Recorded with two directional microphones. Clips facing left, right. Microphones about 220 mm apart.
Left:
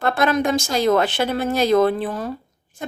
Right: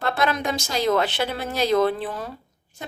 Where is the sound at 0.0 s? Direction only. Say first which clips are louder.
Left 5 dB; 50° left (ahead or behind).